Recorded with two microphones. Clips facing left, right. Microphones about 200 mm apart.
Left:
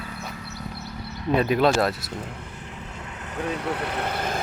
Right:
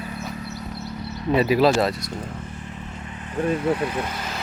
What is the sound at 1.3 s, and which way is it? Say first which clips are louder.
Speech: right 2 dB; 5° right (ahead or behind).